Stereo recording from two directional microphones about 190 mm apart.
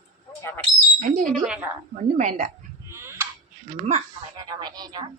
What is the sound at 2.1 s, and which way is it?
Speech, 40° right (ahead or behind).